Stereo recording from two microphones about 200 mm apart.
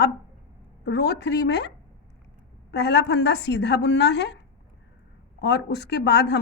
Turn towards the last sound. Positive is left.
turn(degrees=60)  # may be behind; listen again after turning